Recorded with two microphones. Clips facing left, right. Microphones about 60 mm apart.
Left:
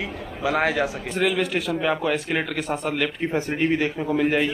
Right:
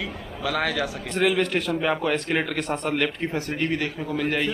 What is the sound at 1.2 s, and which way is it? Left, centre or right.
Speech, centre.